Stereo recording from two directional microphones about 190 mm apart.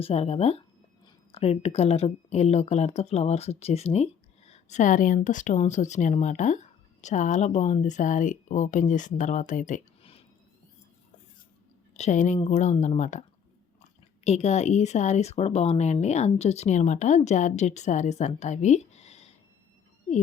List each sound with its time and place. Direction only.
0.0 s speech: 30° left (ahead or behind)
11.9 s speech: 40° left (ahead or behind)
14.3 s speech: 35° left (ahead or behind)